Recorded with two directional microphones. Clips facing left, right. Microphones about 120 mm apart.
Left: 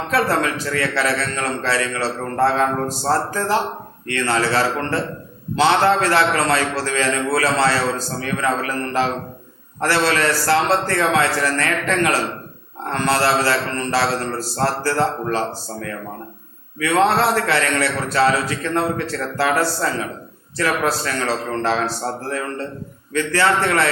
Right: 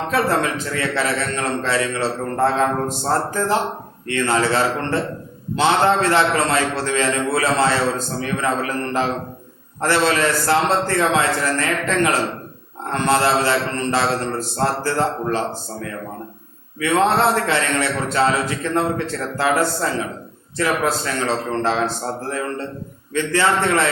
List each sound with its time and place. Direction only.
0.1 s a man's voice: 25° right (ahead or behind)
16.8 s a man's voice: 20° right (ahead or behind)